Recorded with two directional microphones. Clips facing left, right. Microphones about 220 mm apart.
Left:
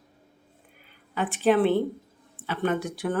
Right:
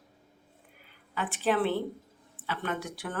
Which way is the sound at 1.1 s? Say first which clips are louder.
Left 7 dB; 20° left (ahead or behind).